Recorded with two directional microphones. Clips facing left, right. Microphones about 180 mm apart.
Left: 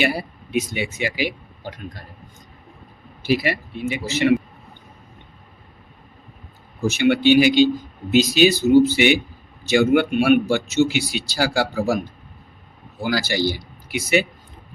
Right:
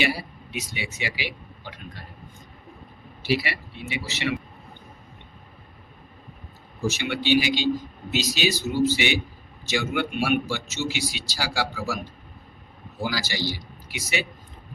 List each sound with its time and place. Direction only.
0.0 s speech: 50° left (ahead or behind)
3.2 s speech: 45° left (ahead or behind)
6.8 s a man's voice: 60° left (ahead or behind)
13.1 s a man's voice: 55° left (ahead or behind)